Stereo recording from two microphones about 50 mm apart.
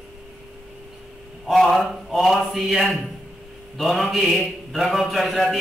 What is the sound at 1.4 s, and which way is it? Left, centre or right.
A man's voice, centre.